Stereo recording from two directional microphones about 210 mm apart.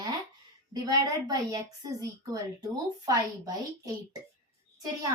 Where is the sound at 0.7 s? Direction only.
20° right (ahead or behind).